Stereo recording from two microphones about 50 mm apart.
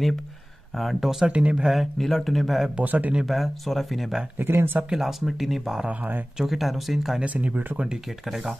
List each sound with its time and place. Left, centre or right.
0.7 s speech: centre
1.2 s speech: centre
1.7 s speech: centre
2.8 s speech: right
3.3 s speech: centre
4.4 s speech: right
4.8 s speech: centre
5.9 s speech: right
6.3 s speech: centre
7.2 s speech: right
7.7 s speech: centre